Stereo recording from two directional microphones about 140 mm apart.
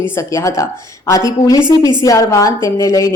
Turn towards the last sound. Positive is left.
turn(degrees=25)  # may be behind; listen again after turning